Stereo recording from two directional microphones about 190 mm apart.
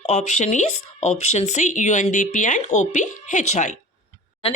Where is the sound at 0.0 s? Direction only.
35° left (ahead or behind).